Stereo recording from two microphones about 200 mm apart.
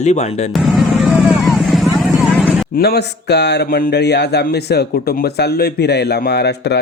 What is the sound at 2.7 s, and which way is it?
Speech, 50° left (ahead or behind).